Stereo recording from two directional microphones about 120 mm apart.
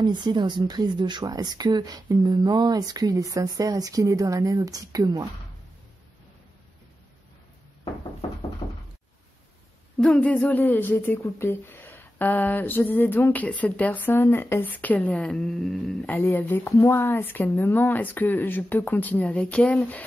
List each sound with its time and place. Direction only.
0.0 s a woman's voice: 40° right (ahead or behind)
8.6 s door: 40° left (ahead or behind)
9.9 s speech: 10° left (ahead or behind)
16.1 s speech: 15° left (ahead or behind)